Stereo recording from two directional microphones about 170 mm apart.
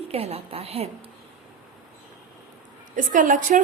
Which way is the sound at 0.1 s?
35° right (ahead or behind).